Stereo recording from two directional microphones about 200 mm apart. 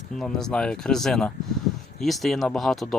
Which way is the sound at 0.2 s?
5° left (ahead or behind).